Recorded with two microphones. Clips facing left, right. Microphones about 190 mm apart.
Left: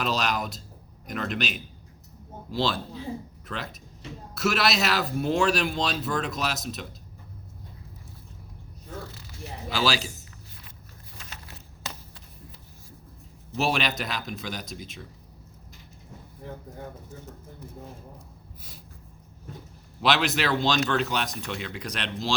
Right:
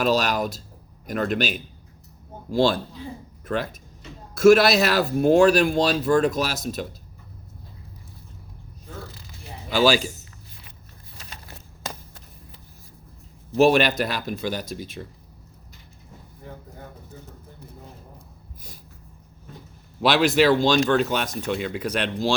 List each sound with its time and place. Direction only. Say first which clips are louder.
0.0 s speech: right 6 dB; 45° right (ahead or behind)
9.7 s speech: right 8 dB; 45° right (ahead or behind)
13.5 s speech: right 9 dB; 45° right (ahead or behind)
20.0 s speech: right 7 dB; 50° right (ahead or behind)